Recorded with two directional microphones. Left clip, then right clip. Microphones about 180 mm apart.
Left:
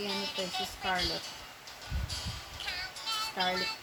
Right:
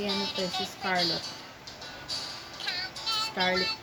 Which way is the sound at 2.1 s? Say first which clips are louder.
Right 5 dB; 20° right (ahead or behind).